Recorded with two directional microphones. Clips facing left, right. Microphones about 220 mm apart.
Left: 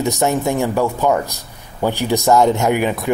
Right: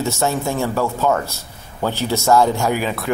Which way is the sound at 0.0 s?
15° left (ahead or behind).